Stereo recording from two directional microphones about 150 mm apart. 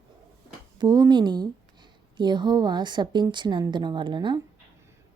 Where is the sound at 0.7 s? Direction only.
25° right (ahead or behind).